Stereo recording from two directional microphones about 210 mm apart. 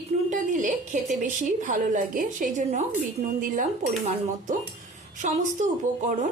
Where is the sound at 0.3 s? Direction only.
35° right (ahead or behind).